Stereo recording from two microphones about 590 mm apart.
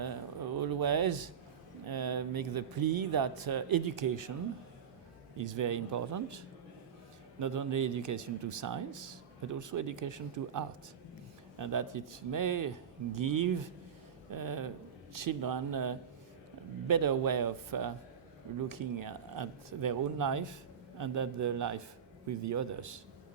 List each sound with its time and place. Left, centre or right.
0.0 s a sound: right
1.9 s speech: right
5.4 s a man's voice: right